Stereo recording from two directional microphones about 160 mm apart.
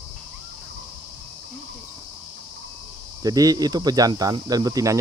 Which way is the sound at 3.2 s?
25° right (ahead or behind).